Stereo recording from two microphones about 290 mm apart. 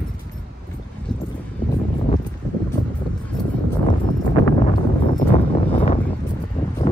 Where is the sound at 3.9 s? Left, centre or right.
Centre.